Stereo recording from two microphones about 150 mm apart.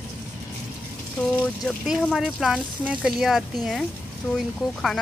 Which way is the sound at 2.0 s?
Centre (ahead or behind).